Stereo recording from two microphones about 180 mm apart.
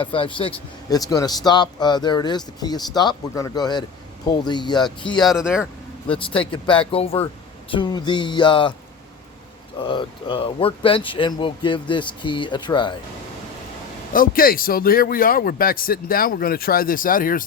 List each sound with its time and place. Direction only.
0.0 s speech: 30° left (ahead or behind)
5.3 s speech: 5° right (ahead or behind)
6.5 s speech: 30° left (ahead or behind)
9.8 s speech: 25° left (ahead or behind)
14.1 s speech: 50° left (ahead or behind)